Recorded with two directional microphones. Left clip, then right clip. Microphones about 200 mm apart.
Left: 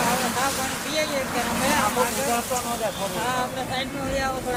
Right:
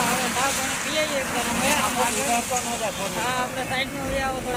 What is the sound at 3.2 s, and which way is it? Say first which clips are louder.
Speech: right 1 dB; 10° right (ahead or behind).